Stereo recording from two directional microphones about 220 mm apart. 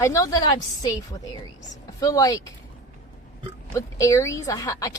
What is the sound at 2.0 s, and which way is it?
Speech, 15° left (ahead or behind).